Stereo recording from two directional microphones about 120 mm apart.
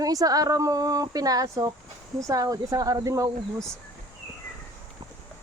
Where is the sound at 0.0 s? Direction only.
30° right (ahead or behind).